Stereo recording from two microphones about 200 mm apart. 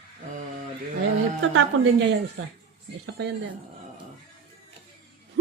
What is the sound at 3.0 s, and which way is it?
Speech, 60° right (ahead or behind).